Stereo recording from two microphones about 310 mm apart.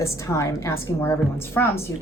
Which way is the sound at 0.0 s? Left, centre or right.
Centre.